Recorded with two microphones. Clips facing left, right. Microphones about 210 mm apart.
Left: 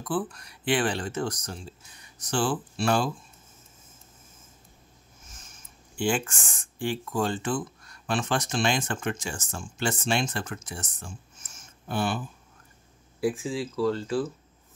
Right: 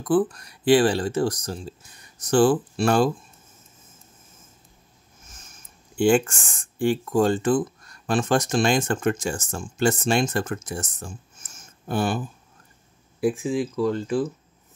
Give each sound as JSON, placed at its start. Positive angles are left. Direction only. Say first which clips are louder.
{"t": 0.0, "sound": "speech", "louder": "right 9 dB", "side_deg": -40}
{"t": 2.3, "sound": "speech", "louder": "right 9 dB", "side_deg": -50}
{"t": 5.9, "sound": "speech", "louder": "right 8 dB", "side_deg": -50}
{"t": 13.2, "sound": "speech", "louder": "right 5 dB", "side_deg": -20}